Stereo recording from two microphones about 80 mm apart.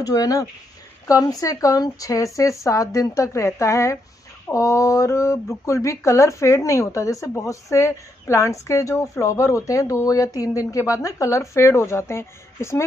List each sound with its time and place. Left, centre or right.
0.0 s speech: left